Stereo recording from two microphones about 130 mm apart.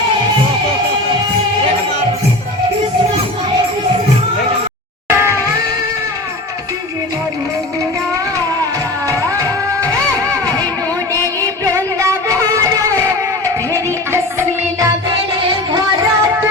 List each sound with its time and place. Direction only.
5.0 s music: 20° right (ahead or behind)
9.0 s music: 25° right (ahead or behind)
11.1 s music: 15° left (ahead or behind)
11.6 s music: 25° right (ahead or behind)
14.1 s music: 20° right (ahead or behind)